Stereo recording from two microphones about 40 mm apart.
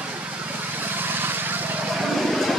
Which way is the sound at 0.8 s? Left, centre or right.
Right.